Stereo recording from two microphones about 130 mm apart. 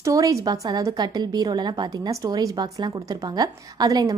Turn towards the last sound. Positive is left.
turn(degrees=-30)  # may be behind; listen again after turning